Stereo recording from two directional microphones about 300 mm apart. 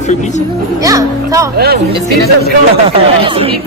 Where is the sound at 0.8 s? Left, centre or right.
Centre.